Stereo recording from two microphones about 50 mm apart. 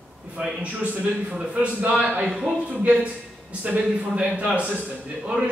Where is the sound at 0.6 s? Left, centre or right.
Right.